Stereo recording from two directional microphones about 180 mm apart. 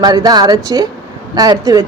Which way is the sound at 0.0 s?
20° right (ahead or behind).